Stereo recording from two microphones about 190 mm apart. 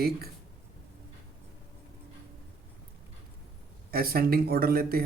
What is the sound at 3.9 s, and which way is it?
Speech, 50° right (ahead or behind).